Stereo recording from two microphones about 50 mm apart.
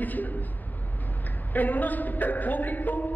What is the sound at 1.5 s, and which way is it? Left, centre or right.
A man's voice, left.